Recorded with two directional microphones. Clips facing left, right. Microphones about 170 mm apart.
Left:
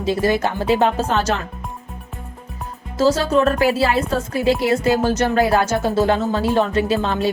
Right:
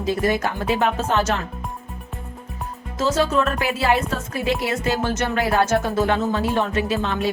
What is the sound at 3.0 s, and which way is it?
A woman's voice, 35° left (ahead or behind).